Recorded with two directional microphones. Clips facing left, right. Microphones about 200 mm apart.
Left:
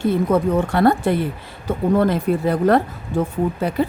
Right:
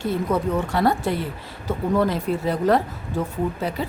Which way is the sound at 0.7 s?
55° left (ahead or behind).